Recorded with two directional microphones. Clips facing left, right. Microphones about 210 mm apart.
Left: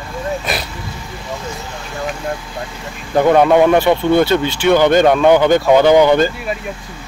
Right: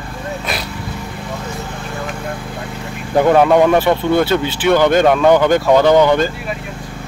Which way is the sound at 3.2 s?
5° left (ahead or behind).